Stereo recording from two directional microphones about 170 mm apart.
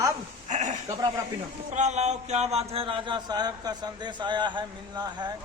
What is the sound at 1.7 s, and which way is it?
Speech, 40° right (ahead or behind).